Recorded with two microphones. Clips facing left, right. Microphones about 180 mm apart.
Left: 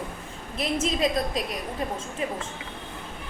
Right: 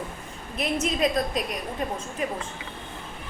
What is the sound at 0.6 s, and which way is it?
Speech, 30° left (ahead or behind).